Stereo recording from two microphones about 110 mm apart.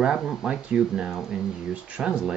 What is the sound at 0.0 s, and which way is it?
Speech, centre (ahead or behind).